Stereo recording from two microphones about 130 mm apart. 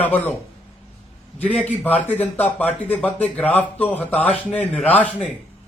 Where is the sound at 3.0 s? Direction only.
10° left (ahead or behind).